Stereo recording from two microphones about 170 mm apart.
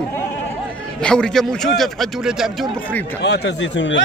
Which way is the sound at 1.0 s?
5° left (ahead or behind).